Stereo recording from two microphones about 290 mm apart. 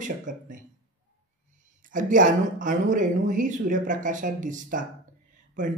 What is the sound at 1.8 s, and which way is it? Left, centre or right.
A woman's voice, right.